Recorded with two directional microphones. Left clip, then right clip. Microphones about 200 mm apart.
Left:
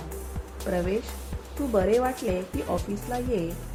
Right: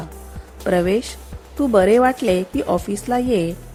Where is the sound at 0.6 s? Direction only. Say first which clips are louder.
Right 10 dB; 40° right (ahead or behind).